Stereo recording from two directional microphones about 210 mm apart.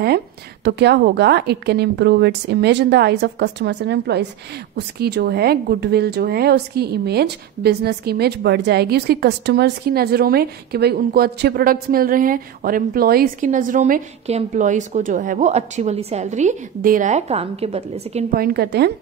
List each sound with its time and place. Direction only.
0.7 s speech: 50° right (ahead or behind); by 18.2 s 30° right (ahead or behind)
18.3 s speech: 45° right (ahead or behind)